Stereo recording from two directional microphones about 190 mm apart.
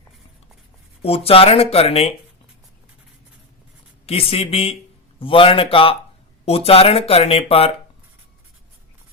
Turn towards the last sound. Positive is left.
turn(degrees=30)  # may be behind; listen again after turning